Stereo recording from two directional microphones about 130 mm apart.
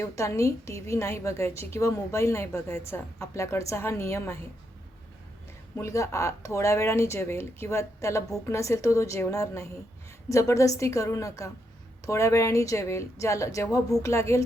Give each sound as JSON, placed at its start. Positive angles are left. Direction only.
{"t": 0.0, "sound": "a woman's voice", "side_deg": 20}
{"t": 5.7, "sound": "a woman's voice", "side_deg": 25}